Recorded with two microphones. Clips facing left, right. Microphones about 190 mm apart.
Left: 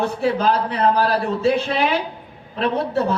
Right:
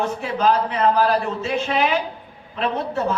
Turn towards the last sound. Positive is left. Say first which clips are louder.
# left 3 dB
turn(degrees=35)  # may be behind; listen again after turning